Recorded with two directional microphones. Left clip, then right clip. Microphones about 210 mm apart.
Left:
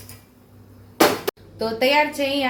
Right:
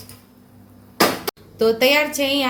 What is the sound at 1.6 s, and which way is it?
Speech, 45° right (ahead or behind).